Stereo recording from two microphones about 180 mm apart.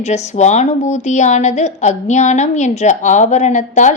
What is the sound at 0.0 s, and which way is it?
A woman's voice, 40° left (ahead or behind).